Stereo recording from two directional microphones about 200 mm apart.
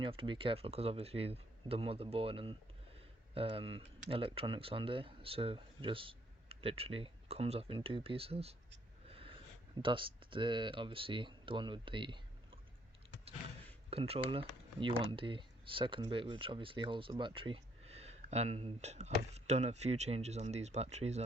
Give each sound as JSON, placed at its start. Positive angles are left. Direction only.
{"t": 0.0, "sound": "speech", "side_deg": -25}
{"t": 9.0, "sound": "a sound", "side_deg": -30}
{"t": 9.8, "sound": "speech", "side_deg": -25}
{"t": 13.9, "sound": "speech", "side_deg": -30}